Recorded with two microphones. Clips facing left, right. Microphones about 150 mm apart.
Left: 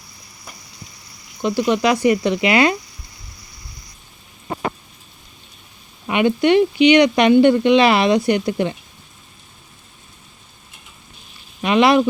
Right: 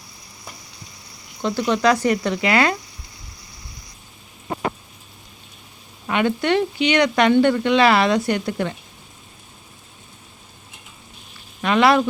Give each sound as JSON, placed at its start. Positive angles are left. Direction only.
{"t": 1.4, "sound": "speech", "side_deg": 15}
{"t": 6.1, "sound": "speech", "side_deg": 15}
{"t": 11.6, "sound": "speech", "side_deg": 20}